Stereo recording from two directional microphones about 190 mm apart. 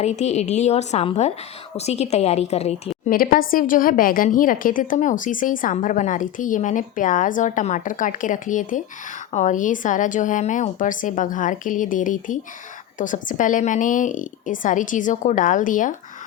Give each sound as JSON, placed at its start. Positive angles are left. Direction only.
{"t": 0.0, "sound": "a woman's voice", "side_deg": 35}
{"t": 3.1, "sound": "a woman's voice", "side_deg": 50}